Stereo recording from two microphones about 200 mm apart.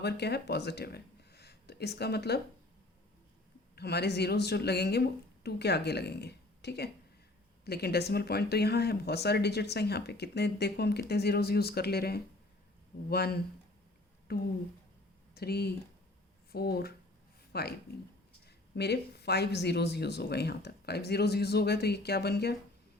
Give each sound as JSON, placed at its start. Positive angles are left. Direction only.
{"t": 0.0, "sound": "speech", "side_deg": 55}
{"t": 3.8, "sound": "speech", "side_deg": 55}